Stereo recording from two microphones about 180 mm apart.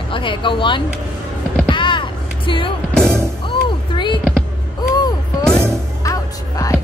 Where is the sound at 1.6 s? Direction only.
25° left (ahead or behind).